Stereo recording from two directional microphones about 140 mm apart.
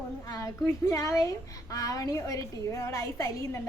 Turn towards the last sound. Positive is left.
turn(degrees=20)  # may be behind; listen again after turning